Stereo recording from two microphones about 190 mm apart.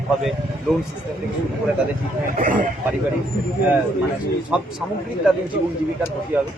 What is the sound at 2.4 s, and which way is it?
Speech, 45° right (ahead or behind).